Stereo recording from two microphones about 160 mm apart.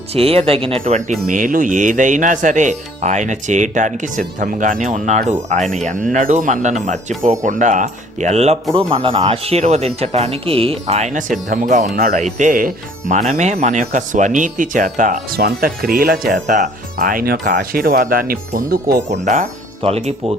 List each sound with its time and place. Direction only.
0.1 s speech: 35° right (ahead or behind)
1.3 s speech: 55° right (ahead or behind)
15.4 s speech: 75° right (ahead or behind)
19.0 s speech: 45° right (ahead or behind)